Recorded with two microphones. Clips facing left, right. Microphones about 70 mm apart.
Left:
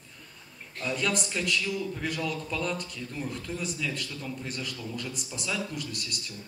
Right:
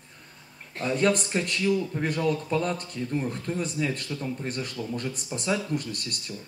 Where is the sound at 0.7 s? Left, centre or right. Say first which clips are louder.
Right 6 dB; right.